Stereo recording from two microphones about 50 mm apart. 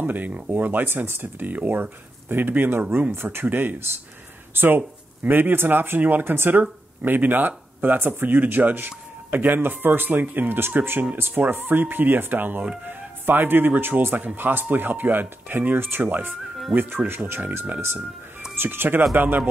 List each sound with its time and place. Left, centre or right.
0.0 s speech: right
6.5 s speech: right
7.1 s speech: right
11.1 s speech: right
17.6 s speech: right
18.6 s speech: right